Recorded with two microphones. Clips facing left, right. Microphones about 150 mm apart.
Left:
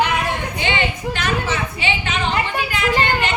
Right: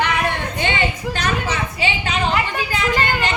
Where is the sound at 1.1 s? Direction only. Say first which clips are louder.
Even; 40° right (ahead or behind).